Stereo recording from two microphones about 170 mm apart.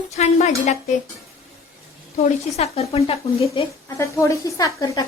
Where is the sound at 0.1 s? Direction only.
40° left (ahead or behind).